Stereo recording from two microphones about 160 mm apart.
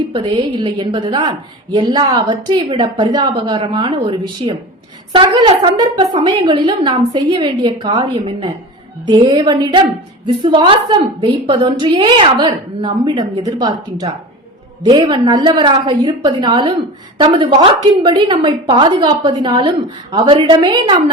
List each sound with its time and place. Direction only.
0.1 s a woman's voice: 30° right (ahead or behind)